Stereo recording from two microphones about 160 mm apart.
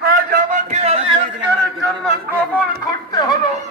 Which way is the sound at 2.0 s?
10° left (ahead or behind).